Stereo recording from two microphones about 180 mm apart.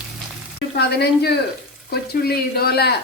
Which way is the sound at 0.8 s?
65° left (ahead or behind).